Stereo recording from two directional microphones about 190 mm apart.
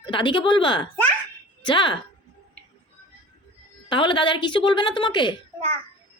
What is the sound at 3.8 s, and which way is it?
A woman's voice, 25° left (ahead or behind).